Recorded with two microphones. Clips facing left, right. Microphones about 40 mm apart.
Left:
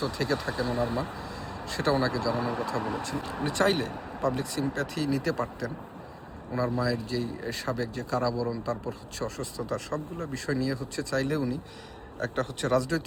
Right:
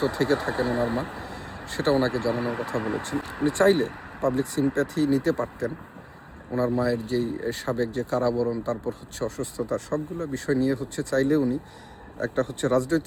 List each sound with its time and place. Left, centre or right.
0.0 s speech: right
12.2 s speech: left
12.7 s speech: right